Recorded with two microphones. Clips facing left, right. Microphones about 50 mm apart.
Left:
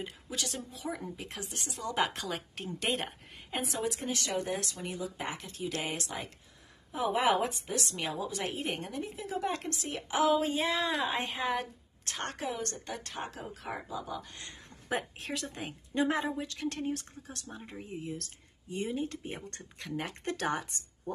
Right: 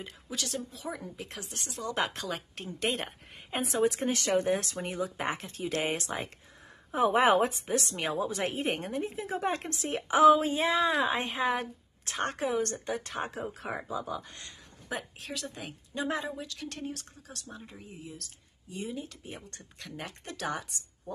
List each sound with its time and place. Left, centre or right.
0.0 s speech: centre
3.7 s speech: right
4.1 s speech: right
10.1 s a woman's voice: centre
14.9 s a woman's voice: left
17.8 s speech: left
19.8 s a woman's voice: centre
20.2 s speech: left